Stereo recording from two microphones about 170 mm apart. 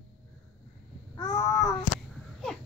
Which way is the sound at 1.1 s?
15° left (ahead or behind).